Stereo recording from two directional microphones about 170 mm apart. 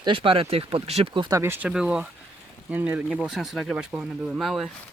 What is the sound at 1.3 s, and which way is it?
Speech, 15° right (ahead or behind).